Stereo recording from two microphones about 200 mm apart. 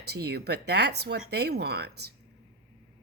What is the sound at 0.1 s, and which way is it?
Speech, 55° right (ahead or behind).